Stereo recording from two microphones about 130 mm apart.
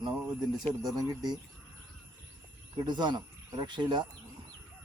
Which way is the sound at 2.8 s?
35° right (ahead or behind).